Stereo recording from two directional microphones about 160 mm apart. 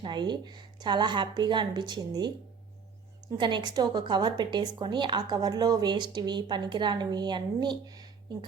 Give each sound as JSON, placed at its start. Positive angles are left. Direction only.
{"t": 0.0, "sound": "a woman's voice", "side_deg": -30}
{"t": 3.3, "sound": "a woman's voice", "side_deg": -30}